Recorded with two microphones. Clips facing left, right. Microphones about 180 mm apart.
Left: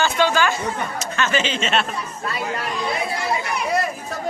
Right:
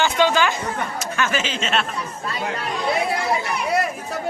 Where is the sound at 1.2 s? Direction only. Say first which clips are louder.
Left 2 dB; 5° right (ahead or behind).